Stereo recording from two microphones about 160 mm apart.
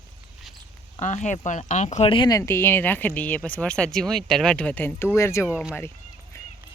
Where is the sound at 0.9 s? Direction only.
45° left (ahead or behind); by 2.4 s 30° left (ahead or behind).